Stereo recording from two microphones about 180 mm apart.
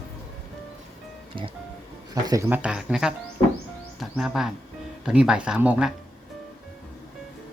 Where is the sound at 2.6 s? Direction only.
5° right (ahead or behind).